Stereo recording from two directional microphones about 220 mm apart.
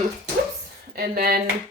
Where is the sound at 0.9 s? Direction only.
45° right (ahead or behind).